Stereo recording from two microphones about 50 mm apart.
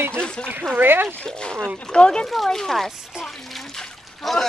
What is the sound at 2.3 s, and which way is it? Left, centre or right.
Speech, centre.